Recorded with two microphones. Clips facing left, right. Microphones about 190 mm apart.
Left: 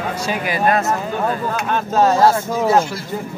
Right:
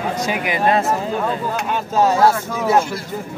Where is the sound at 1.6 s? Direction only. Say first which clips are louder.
Left 2 dB; 10° right (ahead or behind).